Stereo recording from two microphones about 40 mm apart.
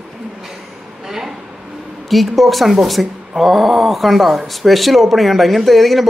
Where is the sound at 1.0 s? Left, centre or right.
Centre.